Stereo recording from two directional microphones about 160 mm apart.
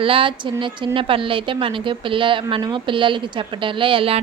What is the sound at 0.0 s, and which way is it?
A woman's voice, 35° right (ahead or behind).